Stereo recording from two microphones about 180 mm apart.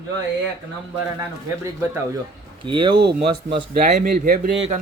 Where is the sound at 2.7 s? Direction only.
30° right (ahead or behind).